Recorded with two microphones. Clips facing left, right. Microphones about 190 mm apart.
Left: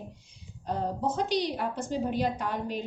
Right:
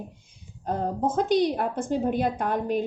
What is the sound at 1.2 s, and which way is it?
A woman's voice, 50° right (ahead or behind).